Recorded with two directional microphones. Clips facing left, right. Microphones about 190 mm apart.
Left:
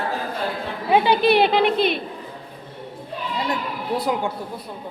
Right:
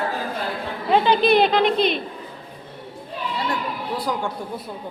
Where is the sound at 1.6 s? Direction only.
55° left (ahead or behind).